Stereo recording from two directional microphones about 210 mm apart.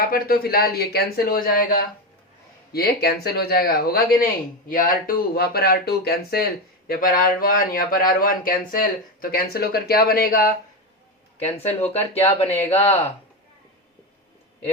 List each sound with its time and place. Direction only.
0.1 s speech: 45° left (ahead or behind)
11.3 s speech: 30° left (ahead or behind)
12.9 s speech: 10° left (ahead or behind)